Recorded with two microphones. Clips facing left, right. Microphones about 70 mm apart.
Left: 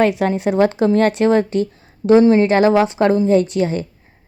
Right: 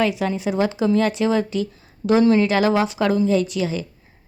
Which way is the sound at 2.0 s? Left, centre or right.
Left.